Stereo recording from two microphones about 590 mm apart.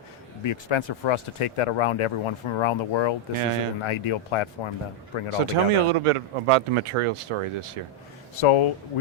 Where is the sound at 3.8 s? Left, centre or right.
Left.